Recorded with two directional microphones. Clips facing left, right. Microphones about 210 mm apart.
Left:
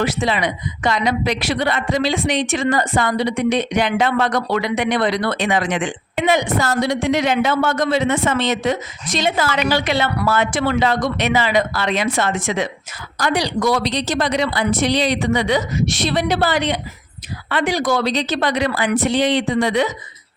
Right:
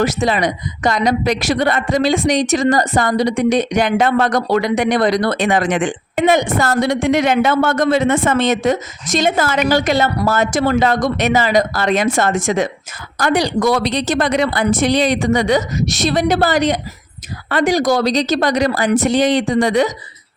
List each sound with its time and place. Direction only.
0.0 s speech: 45° right (ahead or behind)